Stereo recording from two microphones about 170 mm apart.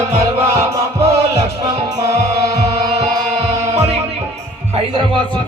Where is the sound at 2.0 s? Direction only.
20° right (ahead or behind).